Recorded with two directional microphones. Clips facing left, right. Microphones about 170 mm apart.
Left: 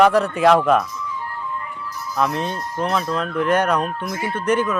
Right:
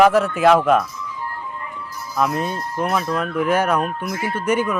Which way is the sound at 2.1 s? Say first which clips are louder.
Right 1 dB; 5° right (ahead or behind).